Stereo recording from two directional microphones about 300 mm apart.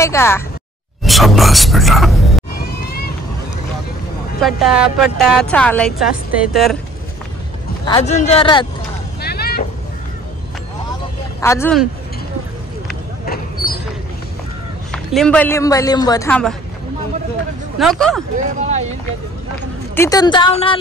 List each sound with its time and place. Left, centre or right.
0.0 s a man's voice: centre
4.4 s a woman's voice: centre
7.8 s a man's voice: centre
9.2 s vehicle: left
11.4 s a man's voice: centre
13.2 s vehicle: left
14.9 s a man's voice: centre
17.7 s a woman's voice: centre
18.6 s speech: right
20.0 s a man's voice: centre